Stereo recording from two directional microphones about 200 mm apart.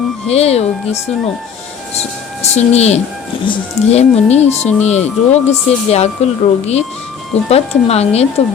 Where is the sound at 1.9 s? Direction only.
35° left (ahead or behind).